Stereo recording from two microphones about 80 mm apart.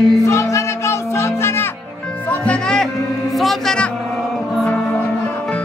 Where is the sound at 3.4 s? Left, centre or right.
Centre.